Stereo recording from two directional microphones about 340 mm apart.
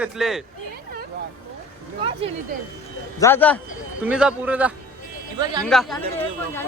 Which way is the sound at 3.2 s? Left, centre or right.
Centre.